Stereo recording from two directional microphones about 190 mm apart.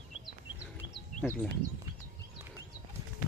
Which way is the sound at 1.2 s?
5° left (ahead or behind).